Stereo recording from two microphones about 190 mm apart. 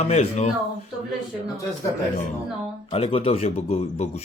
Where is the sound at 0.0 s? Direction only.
35° left (ahead or behind).